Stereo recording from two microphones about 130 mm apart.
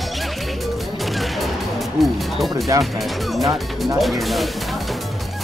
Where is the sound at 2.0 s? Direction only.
Centre (ahead or behind).